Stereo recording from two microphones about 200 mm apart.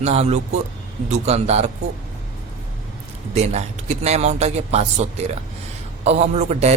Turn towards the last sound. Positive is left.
turn(degrees=-35)  # may be behind; listen again after turning